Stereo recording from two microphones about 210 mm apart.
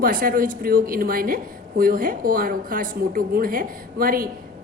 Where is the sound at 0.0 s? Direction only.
45° right (ahead or behind).